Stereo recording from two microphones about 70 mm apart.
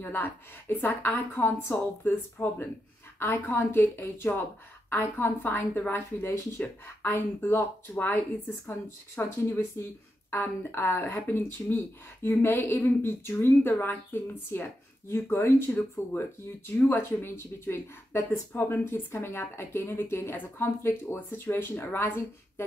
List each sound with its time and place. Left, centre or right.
0.0 s speech: left
6.2 s a woman's voice: left